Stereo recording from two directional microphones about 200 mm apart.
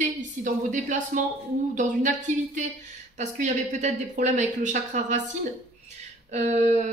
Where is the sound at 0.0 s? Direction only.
40° right (ahead or behind).